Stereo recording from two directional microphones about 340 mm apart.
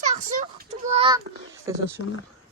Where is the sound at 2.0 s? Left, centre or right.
Left.